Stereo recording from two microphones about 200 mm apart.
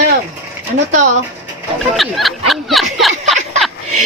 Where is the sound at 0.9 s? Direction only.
40° right (ahead or behind).